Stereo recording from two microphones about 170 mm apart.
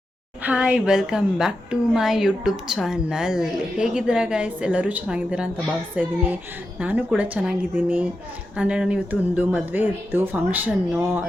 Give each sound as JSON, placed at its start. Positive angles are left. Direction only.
{"t": 0.4, "sound": "a woman's voice", "side_deg": -5}